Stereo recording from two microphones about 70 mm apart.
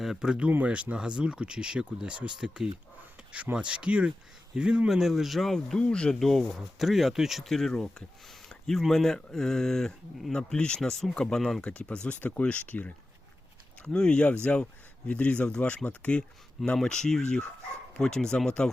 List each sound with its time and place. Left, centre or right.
0.0 s speech: centre
11.6 s speech: centre
13.9 s speech: centre